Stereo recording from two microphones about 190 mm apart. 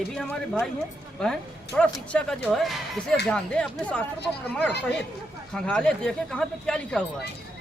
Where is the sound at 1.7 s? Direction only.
5° left (ahead or behind).